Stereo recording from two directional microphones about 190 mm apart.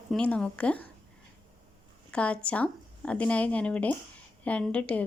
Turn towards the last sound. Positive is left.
turn(degrees=5)  # may be behind; listen again after turning